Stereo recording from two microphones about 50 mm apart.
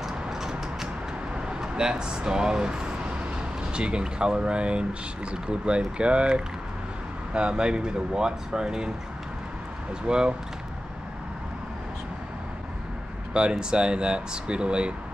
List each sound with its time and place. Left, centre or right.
0.0 s a sound: centre
1.3 s speech: centre
10.0 s speech: centre
13.3 s speech: centre